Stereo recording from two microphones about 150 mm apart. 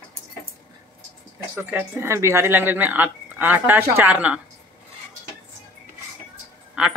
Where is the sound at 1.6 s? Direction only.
15° right (ahead or behind).